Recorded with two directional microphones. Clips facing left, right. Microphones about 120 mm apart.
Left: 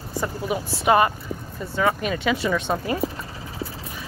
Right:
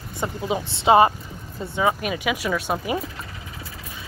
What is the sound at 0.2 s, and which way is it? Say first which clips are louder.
Speech: right 1 dB; 20° right (ahead or behind).